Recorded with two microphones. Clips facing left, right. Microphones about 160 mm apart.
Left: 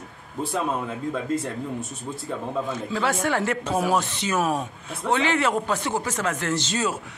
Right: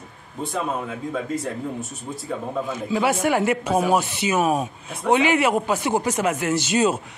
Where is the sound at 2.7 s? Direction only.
10° right (ahead or behind).